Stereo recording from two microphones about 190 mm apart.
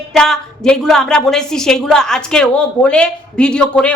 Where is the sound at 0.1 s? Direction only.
5° left (ahead or behind).